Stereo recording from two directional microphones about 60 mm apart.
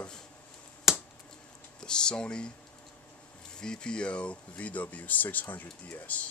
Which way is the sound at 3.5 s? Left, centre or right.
Centre.